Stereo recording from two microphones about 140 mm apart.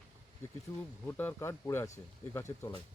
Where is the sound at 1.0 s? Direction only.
15° left (ahead or behind).